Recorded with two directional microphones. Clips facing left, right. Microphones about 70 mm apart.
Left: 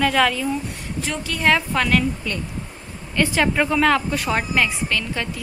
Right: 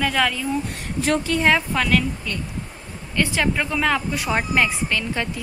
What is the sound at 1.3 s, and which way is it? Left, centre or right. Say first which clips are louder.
Speech: right 6 dB; right.